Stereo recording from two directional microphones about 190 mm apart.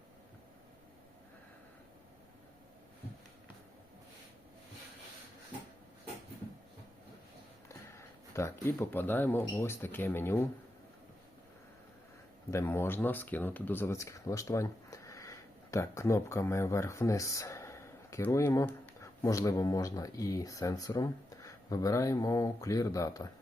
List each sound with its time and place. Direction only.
7.7 s a sound: 15° left (ahead or behind)
8.6 s speech: 10° left (ahead or behind)
12.5 s speech: 15° left (ahead or behind)